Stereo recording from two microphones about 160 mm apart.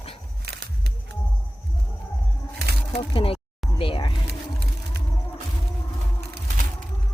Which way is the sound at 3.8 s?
35° left (ahead or behind).